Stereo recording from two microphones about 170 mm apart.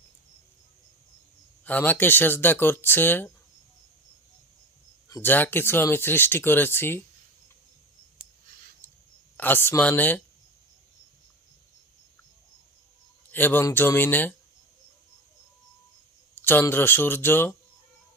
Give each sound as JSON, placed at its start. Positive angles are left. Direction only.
{"t": 1.6, "sound": "speech", "side_deg": 10}
{"t": 5.0, "sound": "speech", "side_deg": 15}
{"t": 9.4, "sound": "speech", "side_deg": 10}
{"t": 13.3, "sound": "speech", "side_deg": 10}
{"t": 16.3, "sound": "speech", "side_deg": 10}